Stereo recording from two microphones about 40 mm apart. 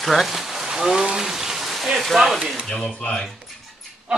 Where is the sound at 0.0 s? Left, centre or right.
Centre.